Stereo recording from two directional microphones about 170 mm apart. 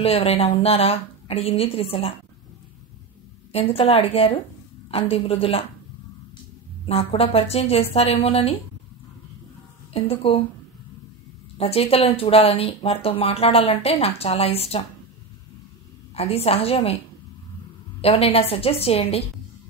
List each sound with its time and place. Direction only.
0.0 s speech: 35° left (ahead or behind)
3.5 s speech: 35° left (ahead or behind)
6.9 s speech: 35° left (ahead or behind)
9.9 s speech: 35° left (ahead or behind)
11.5 s speech: 35° left (ahead or behind)
16.2 s speech: 35° left (ahead or behind)
18.0 s speech: 35° left (ahead or behind)